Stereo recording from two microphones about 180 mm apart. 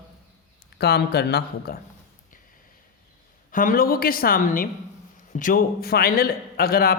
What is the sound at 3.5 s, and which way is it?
A woman's voice, 50° left (ahead or behind).